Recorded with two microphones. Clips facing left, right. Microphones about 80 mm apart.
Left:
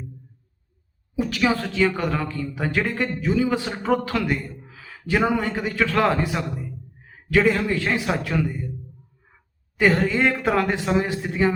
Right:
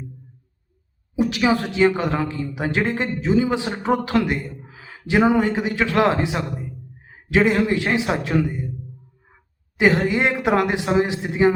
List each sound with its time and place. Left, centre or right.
1.1 s a man's voice: centre
9.7 s speech: centre